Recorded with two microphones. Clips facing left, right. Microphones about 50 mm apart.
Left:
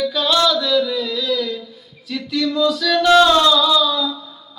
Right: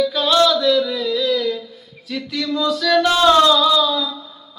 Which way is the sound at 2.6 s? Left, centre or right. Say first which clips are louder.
Right 2 dB; centre.